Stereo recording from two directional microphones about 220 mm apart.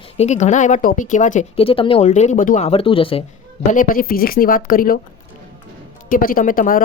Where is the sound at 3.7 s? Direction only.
40° left (ahead or behind).